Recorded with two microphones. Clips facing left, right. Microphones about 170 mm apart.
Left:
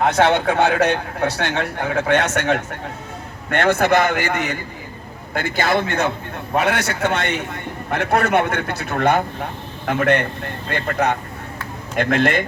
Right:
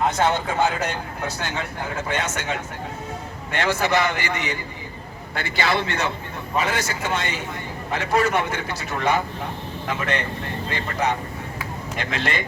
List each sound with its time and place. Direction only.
0.0 s a man's voice: 70° left (ahead or behind); by 6.1 s 50° left (ahead or behind)
6.6 s a man's voice: 65° left (ahead or behind)